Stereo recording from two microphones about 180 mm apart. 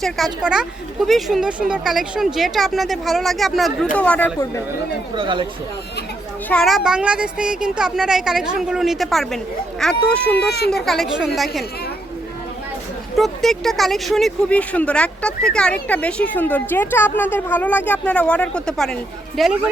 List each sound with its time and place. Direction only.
0.4 s speech: 5° right (ahead or behind)
5.1 s speech: 25° right (ahead or behind)
6.5 s speech: centre (ahead or behind)
13.1 s speech: centre (ahead or behind)